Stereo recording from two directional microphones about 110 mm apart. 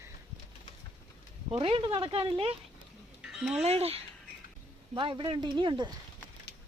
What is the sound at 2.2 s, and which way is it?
Speech, 45° right (ahead or behind).